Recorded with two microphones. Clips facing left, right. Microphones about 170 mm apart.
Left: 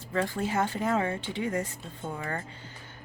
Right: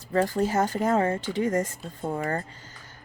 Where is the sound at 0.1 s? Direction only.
40° right (ahead or behind).